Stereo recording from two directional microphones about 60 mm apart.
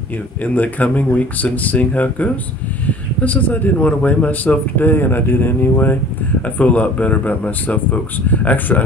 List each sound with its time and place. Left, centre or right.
0.4 s speech: left